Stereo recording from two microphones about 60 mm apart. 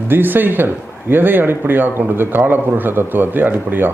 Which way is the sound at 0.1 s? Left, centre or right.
Right.